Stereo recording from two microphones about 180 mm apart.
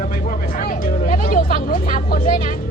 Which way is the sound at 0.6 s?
50° left (ahead or behind).